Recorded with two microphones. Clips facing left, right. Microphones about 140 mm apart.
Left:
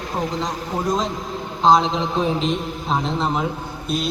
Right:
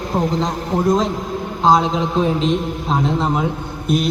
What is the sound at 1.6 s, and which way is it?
A man's voice, 5° right (ahead or behind).